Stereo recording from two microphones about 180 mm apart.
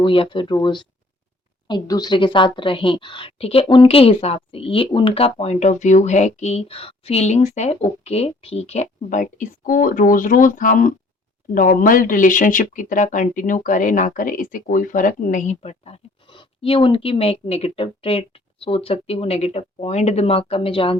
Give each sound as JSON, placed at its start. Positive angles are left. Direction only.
{"t": 0.0, "sound": "a woman's voice", "side_deg": 25}